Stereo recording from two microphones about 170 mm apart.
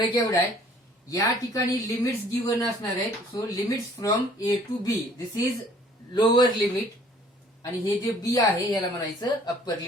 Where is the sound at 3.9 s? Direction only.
25° left (ahead or behind).